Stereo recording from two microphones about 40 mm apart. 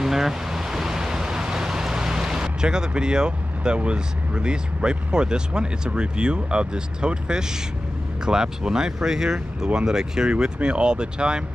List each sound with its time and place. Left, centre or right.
0.0 s speech: centre